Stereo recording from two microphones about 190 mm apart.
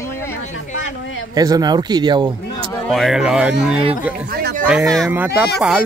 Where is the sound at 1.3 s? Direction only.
20° right (ahead or behind).